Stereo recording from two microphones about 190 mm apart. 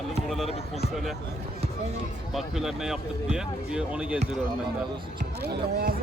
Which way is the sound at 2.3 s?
Centre (ahead or behind).